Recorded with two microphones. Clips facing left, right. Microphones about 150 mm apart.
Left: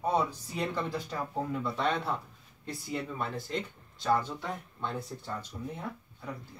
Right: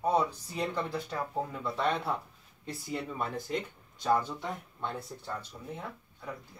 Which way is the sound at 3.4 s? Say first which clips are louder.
Right 1 dB; 15° right (ahead or behind).